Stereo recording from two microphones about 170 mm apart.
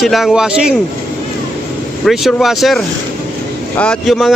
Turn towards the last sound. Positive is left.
turn(degrees=0)  # may be behind; listen again after turning